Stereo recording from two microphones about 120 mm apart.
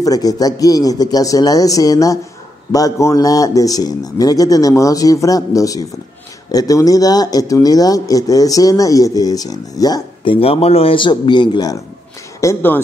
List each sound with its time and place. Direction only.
0.0 s speech: 30° left (ahead or behind)
10.2 s speech: 50° left (ahead or behind)
12.4 s speech: 20° left (ahead or behind)